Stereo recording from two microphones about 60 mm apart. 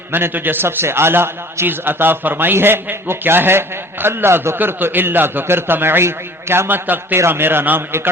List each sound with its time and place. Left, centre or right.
0.1 s a man's voice: right